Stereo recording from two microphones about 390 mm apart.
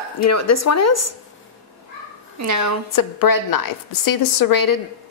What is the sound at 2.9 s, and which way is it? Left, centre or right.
A woman's voice, left.